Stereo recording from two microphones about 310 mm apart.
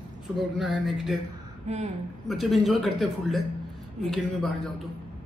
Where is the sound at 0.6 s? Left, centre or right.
Centre.